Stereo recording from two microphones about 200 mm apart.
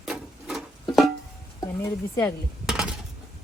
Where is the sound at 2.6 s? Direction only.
Centre (ahead or behind).